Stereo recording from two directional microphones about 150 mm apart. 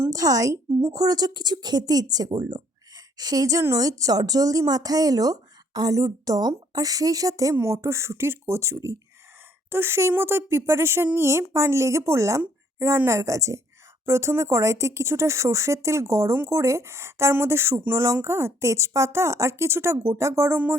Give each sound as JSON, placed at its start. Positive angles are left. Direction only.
{"t": 0.0, "sound": "a woman's voice", "side_deg": -25}